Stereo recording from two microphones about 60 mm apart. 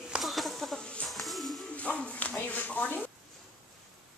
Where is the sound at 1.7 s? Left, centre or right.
Left.